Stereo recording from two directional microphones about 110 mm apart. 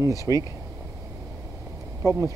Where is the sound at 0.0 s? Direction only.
30° right (ahead or behind).